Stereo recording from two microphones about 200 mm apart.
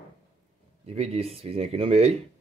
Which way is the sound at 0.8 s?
30° right (ahead or behind).